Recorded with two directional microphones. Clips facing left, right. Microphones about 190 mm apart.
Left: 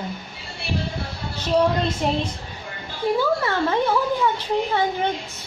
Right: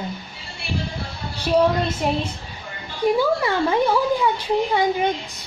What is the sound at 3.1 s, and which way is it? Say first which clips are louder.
Speech: right 2 dB; 10° right (ahead or behind).